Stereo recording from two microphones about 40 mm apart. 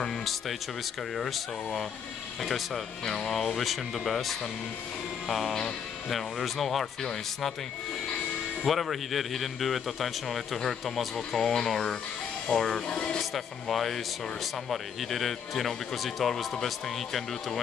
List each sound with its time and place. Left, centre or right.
0.0 s music: centre
1.1 s speech: centre
8.6 s speech: centre
12.8 s speech: left
13.2 s speech: centre